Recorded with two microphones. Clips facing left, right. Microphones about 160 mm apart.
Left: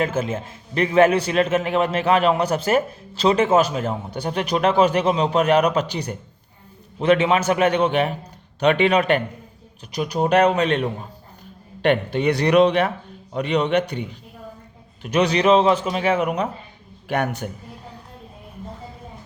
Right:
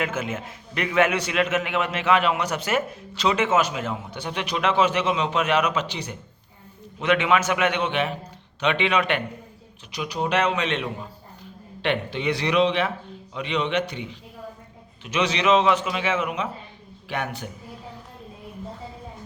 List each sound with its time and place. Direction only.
0.0 s a man's voice: 30° left (ahead or behind); by 17.5 s 50° left (ahead or behind)